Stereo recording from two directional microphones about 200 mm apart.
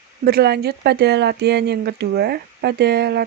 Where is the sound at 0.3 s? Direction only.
50° right (ahead or behind).